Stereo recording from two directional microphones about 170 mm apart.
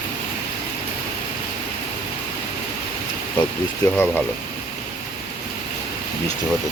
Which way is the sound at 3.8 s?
20° left (ahead or behind).